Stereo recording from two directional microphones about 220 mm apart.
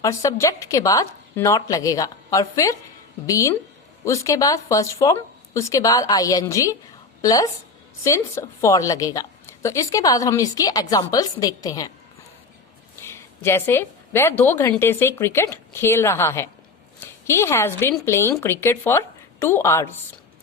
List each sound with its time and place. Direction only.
0.0 s speech: 15° left (ahead or behind)
13.0 s a woman's voice: 10° left (ahead or behind)